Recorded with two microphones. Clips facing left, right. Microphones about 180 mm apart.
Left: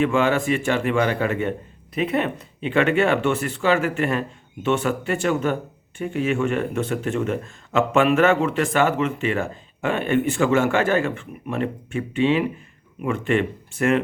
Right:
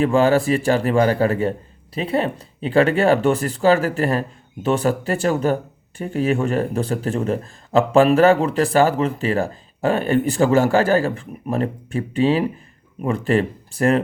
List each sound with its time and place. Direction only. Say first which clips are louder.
0.0 s speech: right 4 dB; 35° right (ahead or behind)